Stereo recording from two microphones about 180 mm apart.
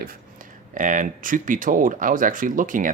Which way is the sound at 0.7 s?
45° right (ahead or behind).